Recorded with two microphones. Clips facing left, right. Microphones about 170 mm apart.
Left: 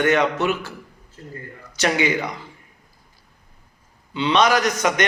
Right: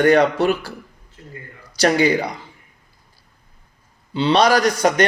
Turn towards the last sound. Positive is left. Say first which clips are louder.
# right 4 dB
turn(degrees=-35)  # may be behind; listen again after turning